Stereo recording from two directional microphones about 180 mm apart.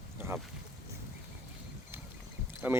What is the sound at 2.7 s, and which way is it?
Speech, 10° right (ahead or behind).